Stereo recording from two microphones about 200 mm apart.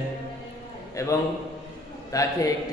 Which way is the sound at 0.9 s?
15° left (ahead or behind).